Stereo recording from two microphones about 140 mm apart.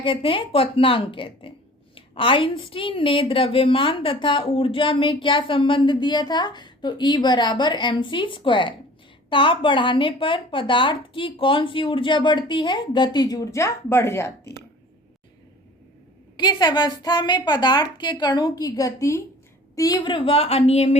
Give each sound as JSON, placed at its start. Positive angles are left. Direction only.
{"t": 0.0, "sound": "a woman's voice", "side_deg": 40}
{"t": 16.4, "sound": "a woman's voice", "side_deg": 30}